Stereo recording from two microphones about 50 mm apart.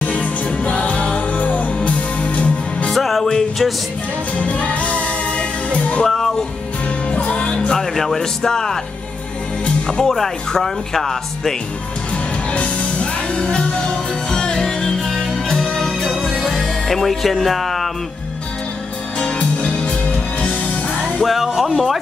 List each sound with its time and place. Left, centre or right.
0.0 s music: left
2.9 s music: centre
4.4 s music: left
6.0 s music: centre
7.1 s music: left
7.9 s speech: centre
9.8 s speech: centre
12.5 s music: left; by 17.8 s centre
19.1 s music: left
21.2 s speech: centre